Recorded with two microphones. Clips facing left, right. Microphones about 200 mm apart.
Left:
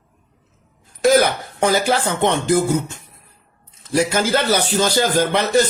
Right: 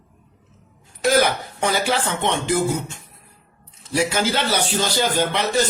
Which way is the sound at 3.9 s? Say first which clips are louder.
Left 3 dB; 45° left (ahead or behind).